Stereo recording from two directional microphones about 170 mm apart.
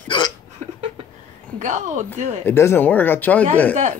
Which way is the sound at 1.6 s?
45° right (ahead or behind).